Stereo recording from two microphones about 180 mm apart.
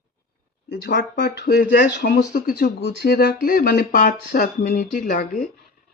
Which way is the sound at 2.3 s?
55° left (ahead or behind).